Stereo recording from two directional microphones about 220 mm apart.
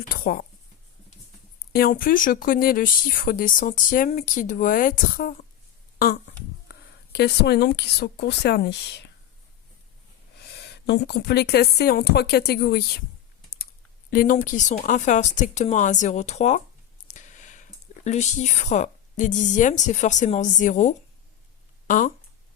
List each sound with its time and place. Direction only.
1.7 s speech: 40° left (ahead or behind)
6.7 s speech: 50° left (ahead or behind)
10.5 s speech: 50° left (ahead or behind)
14.1 s speech: 40° left (ahead or behind)